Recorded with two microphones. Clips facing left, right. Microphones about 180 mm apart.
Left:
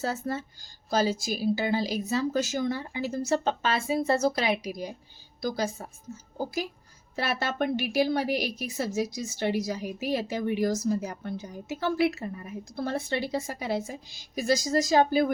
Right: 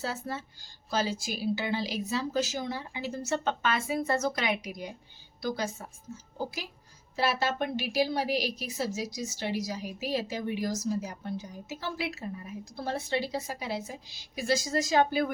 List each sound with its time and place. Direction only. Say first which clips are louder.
0.0 s a woman's voice: left 5 dB; 45° left (ahead or behind)
7.2 s a woman's voice: even; 55° left (ahead or behind); by 15.3 s 40° left (ahead or behind)